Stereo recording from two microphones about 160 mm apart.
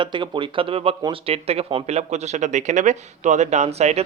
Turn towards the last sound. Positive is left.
turn(degrees=-40)  # may be behind; listen again after turning